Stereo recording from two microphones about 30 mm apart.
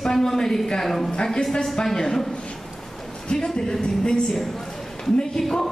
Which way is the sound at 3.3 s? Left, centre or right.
Left.